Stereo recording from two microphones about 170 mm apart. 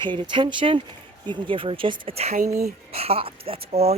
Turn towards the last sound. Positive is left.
turn(degrees=-35)  # may be behind; listen again after turning